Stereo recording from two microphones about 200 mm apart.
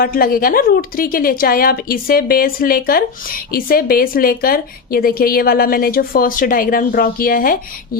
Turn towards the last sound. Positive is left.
turn(degrees=45)  # may be behind; listen again after turning